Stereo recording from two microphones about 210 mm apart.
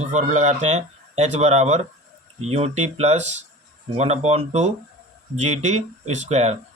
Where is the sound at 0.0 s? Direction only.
35° right (ahead or behind).